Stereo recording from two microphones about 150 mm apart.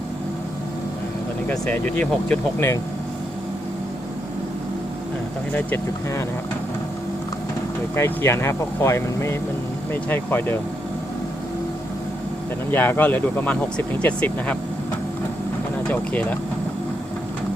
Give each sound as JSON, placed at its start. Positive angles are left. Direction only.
{"t": 1.5, "sound": "speech", "side_deg": 10}
{"t": 5.5, "sound": "speech", "side_deg": 15}
{"t": 7.9, "sound": "speech", "side_deg": 15}
{"t": 12.7, "sound": "speech", "side_deg": 10}
{"t": 15.9, "sound": "speech", "side_deg": 10}